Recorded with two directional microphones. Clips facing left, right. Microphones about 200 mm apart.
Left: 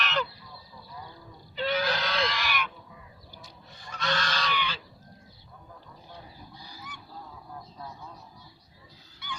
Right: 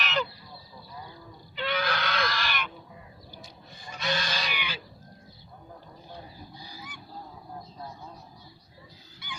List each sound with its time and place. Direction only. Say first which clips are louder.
0.0 s goose: even; 5° right (ahead or behind)
1.5 s goat: left 2 dB; 40° left (ahead or behind); by 2.5 s 20° left (ahead or behind)
2.5 s crow: left 2 dB; 5° left (ahead or behind)
3.8 s goose: even; 10° right (ahead or behind)